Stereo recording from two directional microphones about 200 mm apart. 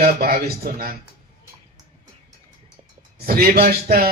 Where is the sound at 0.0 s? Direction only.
50° right (ahead or behind).